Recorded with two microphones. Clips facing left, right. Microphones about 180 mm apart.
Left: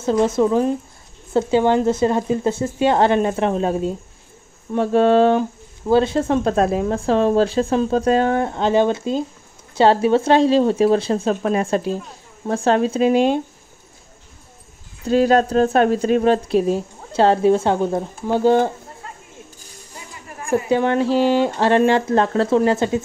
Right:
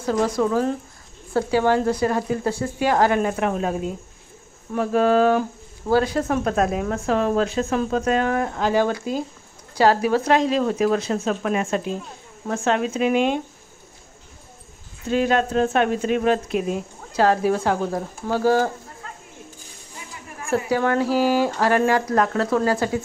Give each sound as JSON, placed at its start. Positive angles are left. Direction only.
{"t": 0.0, "sound": "speech", "side_deg": 25}
{"t": 15.0, "sound": "speech", "side_deg": 35}
{"t": 20.4, "sound": "speech", "side_deg": 20}